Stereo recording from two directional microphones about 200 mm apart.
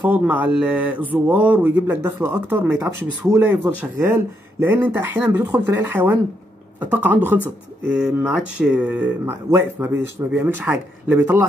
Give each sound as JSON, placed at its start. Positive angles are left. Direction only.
{"t": 0.0, "sound": "speech", "side_deg": -10}